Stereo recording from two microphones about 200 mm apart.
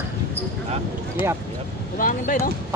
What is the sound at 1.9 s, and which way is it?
Speech, 45° left (ahead or behind).